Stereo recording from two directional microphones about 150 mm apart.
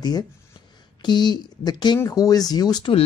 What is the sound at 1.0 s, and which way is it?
Speech, 30° left (ahead or behind).